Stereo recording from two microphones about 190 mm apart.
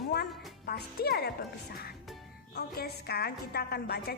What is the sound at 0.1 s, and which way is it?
Music, 55° left (ahead or behind).